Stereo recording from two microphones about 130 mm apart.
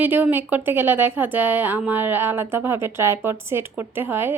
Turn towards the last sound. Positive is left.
turn(degrees=-15)  # may be behind; listen again after turning